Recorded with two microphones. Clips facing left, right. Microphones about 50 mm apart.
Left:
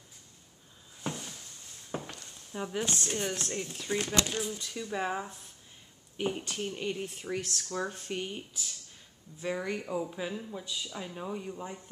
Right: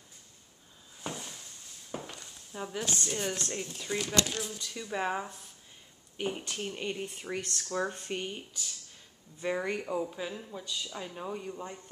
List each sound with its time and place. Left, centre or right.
1.0 s a sound: centre
2.0 s walk: centre
2.5 s speech: centre
4.0 s speech: left
4.3 s speech: centre
4.7 s speech: centre
9.4 s speech: centre